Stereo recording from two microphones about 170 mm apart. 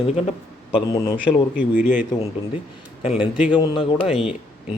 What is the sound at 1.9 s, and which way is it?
Speech, 50° left (ahead or behind).